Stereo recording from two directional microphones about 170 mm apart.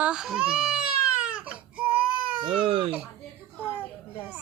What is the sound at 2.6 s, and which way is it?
Speech, 30° right (ahead or behind).